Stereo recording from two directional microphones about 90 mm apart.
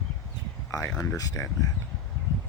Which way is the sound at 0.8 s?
10° left (ahead or behind).